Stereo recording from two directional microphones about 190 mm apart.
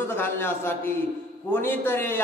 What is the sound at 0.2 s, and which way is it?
A man's voice, 10° left (ahead or behind).